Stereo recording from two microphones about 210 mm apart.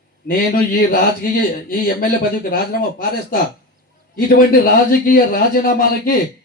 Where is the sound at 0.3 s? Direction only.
45° left (ahead or behind).